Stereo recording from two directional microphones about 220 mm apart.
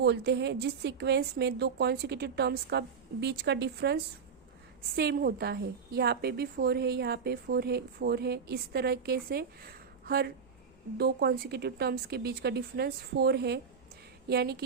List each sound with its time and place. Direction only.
0.0 s a woman's voice: 50° right (ahead or behind)